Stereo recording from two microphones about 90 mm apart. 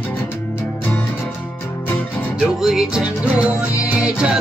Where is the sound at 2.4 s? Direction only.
5° right (ahead or behind).